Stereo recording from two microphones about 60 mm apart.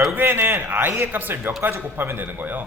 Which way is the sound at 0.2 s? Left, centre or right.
Right.